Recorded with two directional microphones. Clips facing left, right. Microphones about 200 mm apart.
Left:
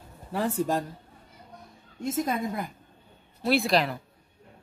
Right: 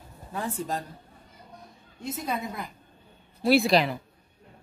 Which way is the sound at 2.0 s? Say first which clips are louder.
Left 4 dB; 50° left (ahead or behind).